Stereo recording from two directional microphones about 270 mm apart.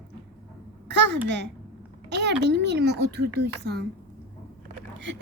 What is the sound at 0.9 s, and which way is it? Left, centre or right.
Speech, right.